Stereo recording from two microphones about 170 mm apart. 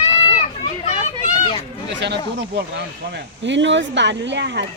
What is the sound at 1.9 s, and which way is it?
Speech, 90° right.